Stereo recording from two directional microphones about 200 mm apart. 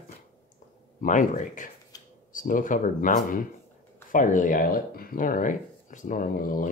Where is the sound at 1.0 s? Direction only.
40° left (ahead or behind).